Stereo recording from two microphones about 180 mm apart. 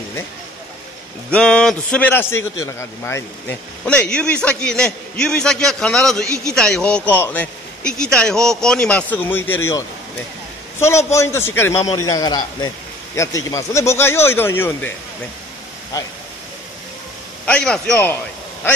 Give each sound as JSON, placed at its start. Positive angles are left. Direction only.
{"t": 1.3, "sound": "a man's voice", "side_deg": 5}
{"t": 11.1, "sound": "a man's voice", "side_deg": 15}
{"t": 17.5, "sound": "a man's voice", "side_deg": 5}